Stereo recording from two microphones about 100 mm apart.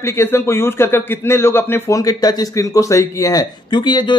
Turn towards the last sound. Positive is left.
turn(degrees=50)  # may be behind; listen again after turning